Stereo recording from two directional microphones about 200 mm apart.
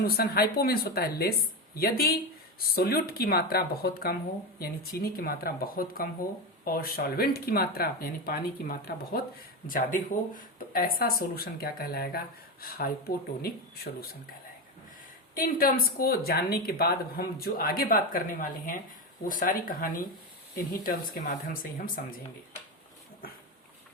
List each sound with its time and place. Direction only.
0.0 s speech: 50° left (ahead or behind)
15.4 s speech: 45° left (ahead or behind)